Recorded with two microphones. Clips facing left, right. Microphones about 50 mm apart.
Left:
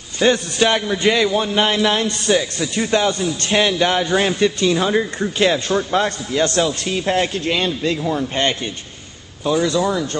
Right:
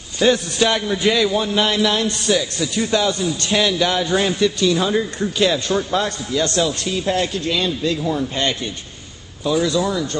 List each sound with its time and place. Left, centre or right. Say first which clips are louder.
0.2 s a man's voice: left 1 dB; centre